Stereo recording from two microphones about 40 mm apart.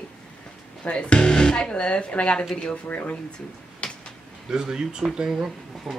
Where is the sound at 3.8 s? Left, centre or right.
Left.